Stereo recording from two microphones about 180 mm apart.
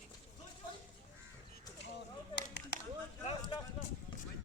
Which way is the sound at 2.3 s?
70° left (ahead or behind).